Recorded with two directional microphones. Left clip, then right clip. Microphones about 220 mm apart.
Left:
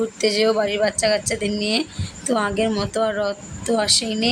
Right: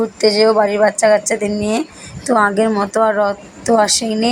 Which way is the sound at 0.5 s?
5° left (ahead or behind).